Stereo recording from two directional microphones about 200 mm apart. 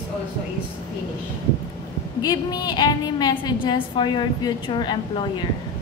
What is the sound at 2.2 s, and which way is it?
A woman's voice, 20° left (ahead or behind).